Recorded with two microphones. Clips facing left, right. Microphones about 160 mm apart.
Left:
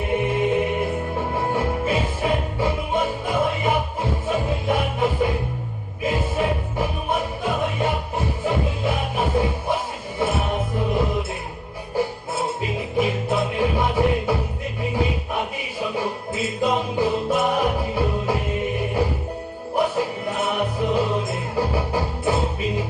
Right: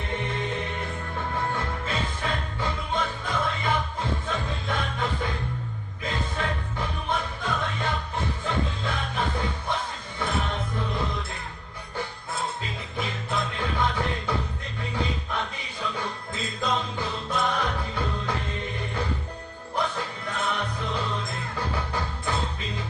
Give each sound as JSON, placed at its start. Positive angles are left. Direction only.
{"t": 0.0, "sound": "music", "side_deg": 10}
{"t": 1.1, "sound": "music", "side_deg": 30}
{"t": 1.4, "sound": "music", "side_deg": 10}